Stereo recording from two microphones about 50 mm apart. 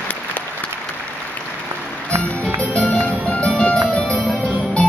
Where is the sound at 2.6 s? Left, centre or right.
Centre.